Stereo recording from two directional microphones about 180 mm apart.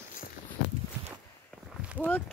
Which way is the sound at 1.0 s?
15° right (ahead or behind).